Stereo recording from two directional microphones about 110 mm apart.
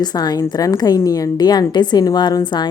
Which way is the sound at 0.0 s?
40° left (ahead or behind).